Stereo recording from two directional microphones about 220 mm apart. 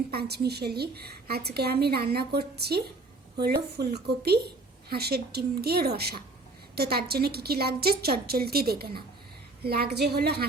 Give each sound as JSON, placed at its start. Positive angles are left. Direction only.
{"t": 0.1, "sound": "a woman's voice", "side_deg": -45}